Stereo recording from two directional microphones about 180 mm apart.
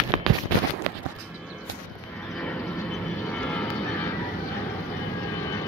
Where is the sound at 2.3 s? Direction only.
5° left (ahead or behind).